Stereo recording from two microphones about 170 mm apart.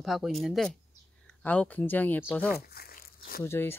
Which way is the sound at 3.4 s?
15° left (ahead or behind).